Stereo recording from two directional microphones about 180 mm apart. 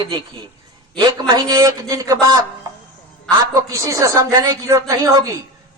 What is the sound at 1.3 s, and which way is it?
Speech, 20° right (ahead or behind).